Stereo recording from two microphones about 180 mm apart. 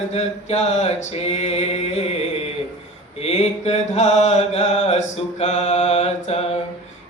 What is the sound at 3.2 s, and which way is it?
A man's voice, 35° left (ahead or behind).